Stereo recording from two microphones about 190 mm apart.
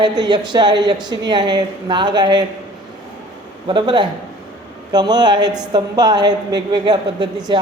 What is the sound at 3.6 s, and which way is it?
A woman's voice, 25° right (ahead or behind).